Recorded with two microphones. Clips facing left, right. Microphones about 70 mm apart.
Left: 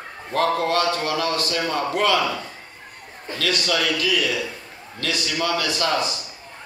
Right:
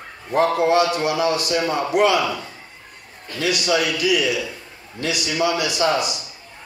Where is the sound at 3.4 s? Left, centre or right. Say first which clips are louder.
Right 3 dB; centre.